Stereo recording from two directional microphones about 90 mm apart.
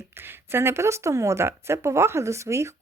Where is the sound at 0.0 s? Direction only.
25° right (ahead or behind).